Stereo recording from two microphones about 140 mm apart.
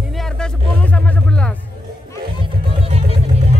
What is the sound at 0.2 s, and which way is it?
Music, 5° left (ahead or behind).